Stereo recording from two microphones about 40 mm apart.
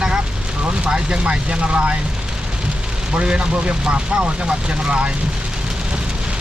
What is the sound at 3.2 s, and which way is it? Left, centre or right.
Speech, right.